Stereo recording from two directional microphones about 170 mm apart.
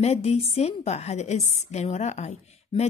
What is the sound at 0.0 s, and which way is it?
A woman's voice, 35° left (ahead or behind).